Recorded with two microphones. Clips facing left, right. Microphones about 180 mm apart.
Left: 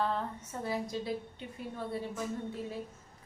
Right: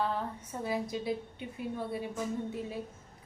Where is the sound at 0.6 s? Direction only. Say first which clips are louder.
Right 2 dB; 15° right (ahead or behind).